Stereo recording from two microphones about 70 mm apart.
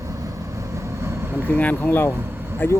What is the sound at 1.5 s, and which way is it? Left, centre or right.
Speech, left.